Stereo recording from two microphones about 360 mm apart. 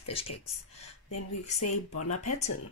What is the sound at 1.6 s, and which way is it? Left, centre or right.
Speech, left.